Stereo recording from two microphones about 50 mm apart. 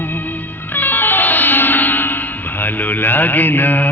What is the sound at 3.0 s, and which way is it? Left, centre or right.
Music, left.